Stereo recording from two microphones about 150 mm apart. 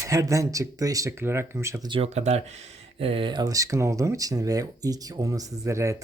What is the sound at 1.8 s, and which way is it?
Speech, 40° right (ahead or behind).